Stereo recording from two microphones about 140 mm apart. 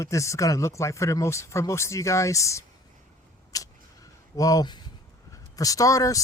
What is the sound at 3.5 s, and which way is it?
Scissors, 25° left (ahead or behind).